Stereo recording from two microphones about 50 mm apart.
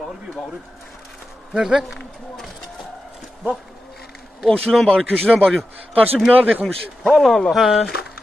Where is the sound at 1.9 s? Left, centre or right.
Centre.